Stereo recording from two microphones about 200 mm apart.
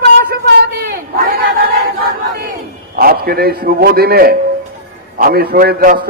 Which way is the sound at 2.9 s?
50° right (ahead or behind).